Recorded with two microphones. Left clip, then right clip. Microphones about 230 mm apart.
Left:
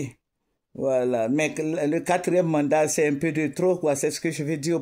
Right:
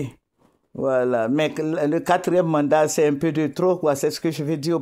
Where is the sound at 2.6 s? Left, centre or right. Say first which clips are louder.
Right 3 dB; right.